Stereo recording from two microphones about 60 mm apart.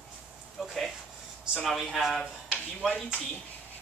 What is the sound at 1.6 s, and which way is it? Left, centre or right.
Speech, centre.